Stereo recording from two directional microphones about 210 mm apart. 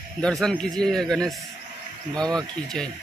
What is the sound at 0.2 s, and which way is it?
Mantra, centre (ahead or behind).